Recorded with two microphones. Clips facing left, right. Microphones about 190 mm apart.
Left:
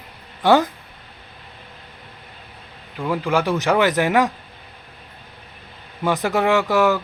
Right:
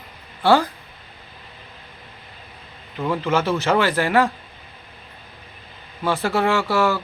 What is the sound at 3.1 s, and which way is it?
Speech, 10° left (ahead or behind).